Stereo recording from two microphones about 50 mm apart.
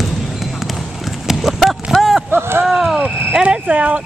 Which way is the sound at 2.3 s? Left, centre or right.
Right.